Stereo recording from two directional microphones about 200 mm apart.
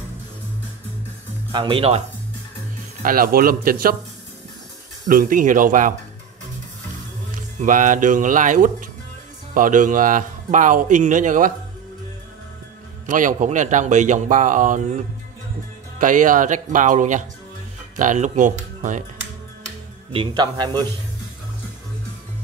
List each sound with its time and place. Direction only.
1.5 s speech: 25° right (ahead or behind)
3.0 s a man's voice: 45° right (ahead or behind)
5.0 s a man's voice: 45° right (ahead or behind)
7.6 s a man's voice: 40° right (ahead or behind)
13.0 s a man's voice: 40° right (ahead or behind)
16.0 s a man's voice: 40° right (ahead or behind)
20.1 s speech: 25° right (ahead or behind)